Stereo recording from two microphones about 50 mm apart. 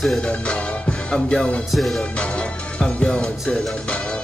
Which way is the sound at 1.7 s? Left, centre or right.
Centre.